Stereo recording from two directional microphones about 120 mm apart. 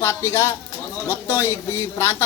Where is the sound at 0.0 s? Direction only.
20° left (ahead or behind).